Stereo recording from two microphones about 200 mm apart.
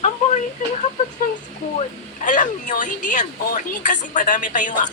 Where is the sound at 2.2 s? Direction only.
40° left (ahead or behind).